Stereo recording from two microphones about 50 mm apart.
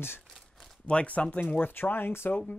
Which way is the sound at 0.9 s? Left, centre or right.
Left.